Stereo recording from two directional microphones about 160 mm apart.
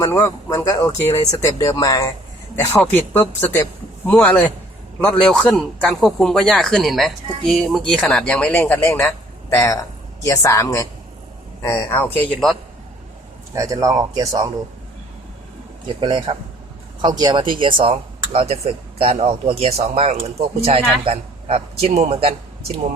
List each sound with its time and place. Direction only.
0.0 s a man's voice: 15° left (ahead or behind)
13.6 s speech: 20° right (ahead or behind)
15.9 s speech: 30° right (ahead or behind)